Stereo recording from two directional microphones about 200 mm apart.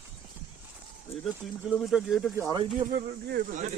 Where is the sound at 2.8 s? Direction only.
50° right (ahead or behind).